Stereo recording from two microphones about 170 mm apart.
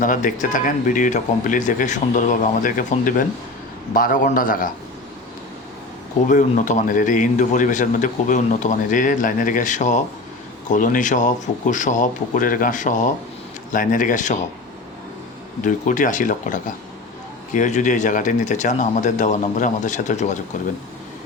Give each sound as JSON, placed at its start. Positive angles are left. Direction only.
{"t": 0.0, "sound": "a man's voice", "side_deg": 50}
{"t": 6.2, "sound": "a man's voice", "side_deg": 50}
{"t": 15.6, "sound": "a man's voice", "side_deg": 50}